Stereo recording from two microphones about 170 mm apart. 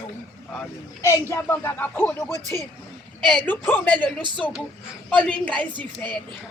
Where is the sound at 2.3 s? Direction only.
20° right (ahead or behind).